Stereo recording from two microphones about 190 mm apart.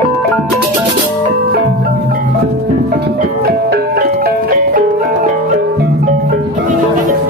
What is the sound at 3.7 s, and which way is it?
Ice cream truck, 55° right (ahead or behind).